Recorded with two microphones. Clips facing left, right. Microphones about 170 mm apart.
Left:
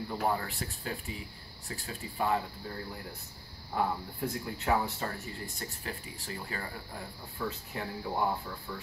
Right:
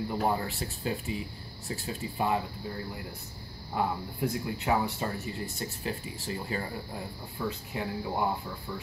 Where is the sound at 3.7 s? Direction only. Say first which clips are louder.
Right 1 dB; 15° right (ahead or behind).